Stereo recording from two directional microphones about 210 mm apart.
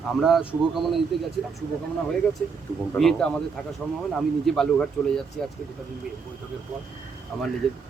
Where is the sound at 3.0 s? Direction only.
5° left (ahead or behind).